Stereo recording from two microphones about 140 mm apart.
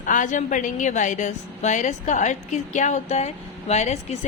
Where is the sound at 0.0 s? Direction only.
65° left (ahead or behind).